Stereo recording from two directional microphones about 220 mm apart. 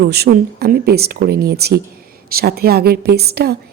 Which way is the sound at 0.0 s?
45° right (ahead or behind).